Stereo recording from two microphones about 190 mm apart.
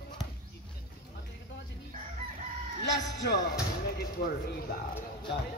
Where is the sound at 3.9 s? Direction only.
55° left (ahead or behind).